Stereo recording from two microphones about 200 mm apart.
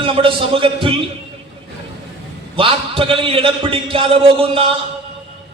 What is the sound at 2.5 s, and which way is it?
A man's voice, 25° right (ahead or behind).